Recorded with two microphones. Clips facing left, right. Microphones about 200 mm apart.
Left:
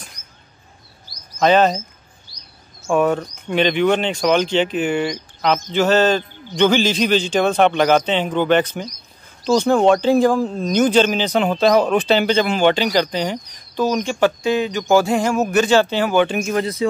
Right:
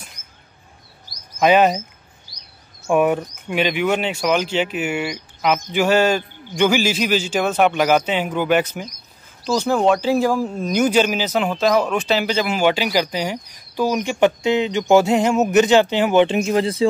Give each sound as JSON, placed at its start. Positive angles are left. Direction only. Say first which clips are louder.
{"t": 1.4, "sound": "speech", "louder": "even", "side_deg": -10}
{"t": 2.3, "sound": "a sound", "louder": "even", "side_deg": -15}
{"t": 2.9, "sound": "speech", "louder": "even", "side_deg": -15}
{"t": 11.5, "sound": "speech", "louder": "left 4 dB", "side_deg": 35}
{"t": 12.1, "sound": "speech", "louder": "left 3 dB", "side_deg": -5}